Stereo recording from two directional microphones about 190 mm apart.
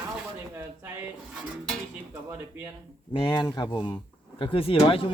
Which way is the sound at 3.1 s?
25° left (ahead or behind).